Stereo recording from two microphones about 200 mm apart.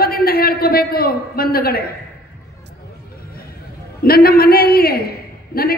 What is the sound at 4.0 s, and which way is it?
A man's voice, 50° left (ahead or behind).